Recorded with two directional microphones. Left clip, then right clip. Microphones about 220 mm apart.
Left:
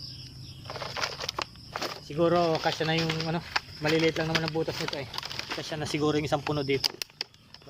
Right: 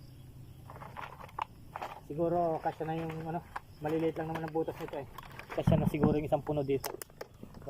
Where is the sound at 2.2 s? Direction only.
25° left (ahead or behind).